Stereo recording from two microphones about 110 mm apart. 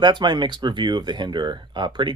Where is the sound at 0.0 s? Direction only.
45° right (ahead or behind).